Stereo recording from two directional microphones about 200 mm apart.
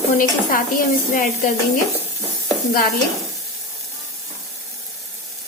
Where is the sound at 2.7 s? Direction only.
45° left (ahead or behind).